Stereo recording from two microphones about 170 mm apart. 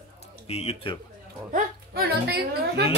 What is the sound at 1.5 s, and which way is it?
A woman's voice, 70° right (ahead or behind).